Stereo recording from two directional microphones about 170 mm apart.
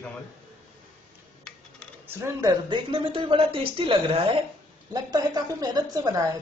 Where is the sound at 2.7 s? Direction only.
30° right (ahead or behind).